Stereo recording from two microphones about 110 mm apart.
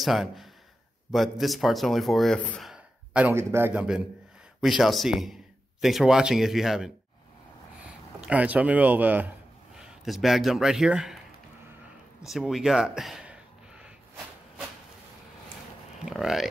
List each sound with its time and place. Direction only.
0.0 s speech: centre (ahead or behind)
2.7 s a sound: 10° right (ahead or behind)
3.3 s a man's voice: 20° right (ahead or behind)
3.7 s a man's voice: 5° right (ahead or behind)
9.8 s speech: 5° right (ahead or behind)
12.2 s a sound: 5° right (ahead or behind)
16.1 s speech: 5° right (ahead or behind)